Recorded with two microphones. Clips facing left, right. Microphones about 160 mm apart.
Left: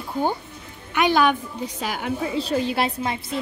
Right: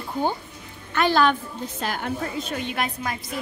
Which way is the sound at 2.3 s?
35° left (ahead or behind).